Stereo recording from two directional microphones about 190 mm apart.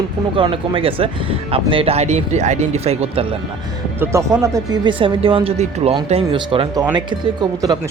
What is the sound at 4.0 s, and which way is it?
Speech, 15° right (ahead or behind).